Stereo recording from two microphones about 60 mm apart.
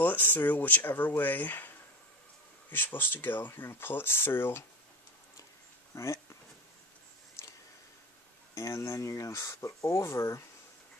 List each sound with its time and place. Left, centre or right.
0.0 s speech: left
5.9 s speech: left
8.5 s speech: left